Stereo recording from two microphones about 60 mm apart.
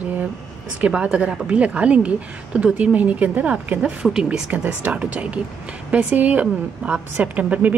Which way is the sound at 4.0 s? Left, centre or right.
Centre.